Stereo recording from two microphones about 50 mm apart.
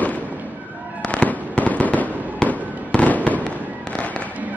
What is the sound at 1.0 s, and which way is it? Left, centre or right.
Fireworks, left.